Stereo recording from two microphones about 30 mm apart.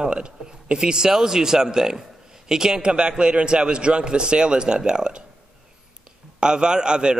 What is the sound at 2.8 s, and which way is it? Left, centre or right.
A man's voice, right.